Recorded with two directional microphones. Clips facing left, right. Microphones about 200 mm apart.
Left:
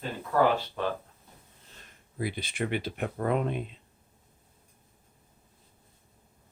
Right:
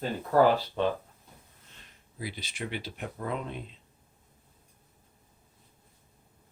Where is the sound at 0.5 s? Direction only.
25° right (ahead or behind).